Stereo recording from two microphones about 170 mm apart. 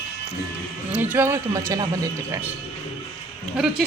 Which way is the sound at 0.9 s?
10° right (ahead or behind).